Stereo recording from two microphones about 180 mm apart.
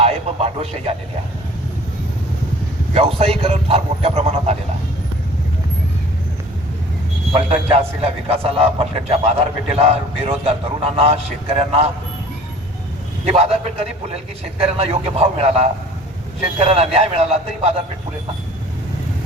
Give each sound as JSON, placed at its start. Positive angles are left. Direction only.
{"t": 0.0, "sound": "a sound", "side_deg": -35}
{"t": 2.9, "sound": "a man's voice", "side_deg": -35}
{"t": 7.3, "sound": "a man's voice", "side_deg": -35}
{"t": 13.2, "sound": "a man's voice", "side_deg": -35}